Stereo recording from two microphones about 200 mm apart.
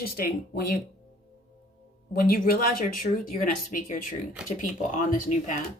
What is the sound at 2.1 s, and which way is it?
Speech, 45° left (ahead or behind).